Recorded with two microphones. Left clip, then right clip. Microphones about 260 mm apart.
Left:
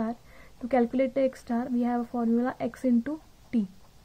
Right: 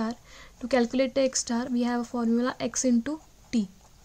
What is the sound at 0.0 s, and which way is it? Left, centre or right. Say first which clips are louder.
Speech: even; right.